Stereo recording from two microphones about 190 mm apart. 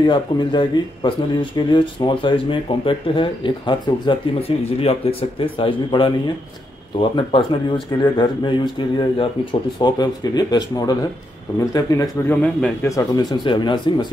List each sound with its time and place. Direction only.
0.0 s a man's voice: 25° left (ahead or behind)